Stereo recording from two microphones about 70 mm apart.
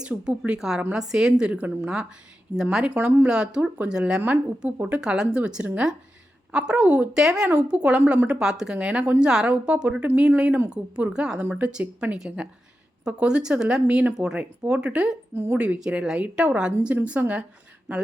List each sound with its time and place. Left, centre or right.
0.0 s a woman's voice: centre
11.4 s a woman's voice: right